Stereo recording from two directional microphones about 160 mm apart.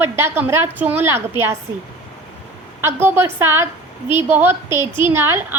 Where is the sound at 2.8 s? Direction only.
15° right (ahead or behind).